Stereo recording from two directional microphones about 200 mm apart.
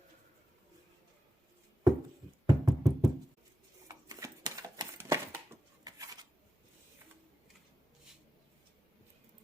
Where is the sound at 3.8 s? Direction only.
20° right (ahead or behind).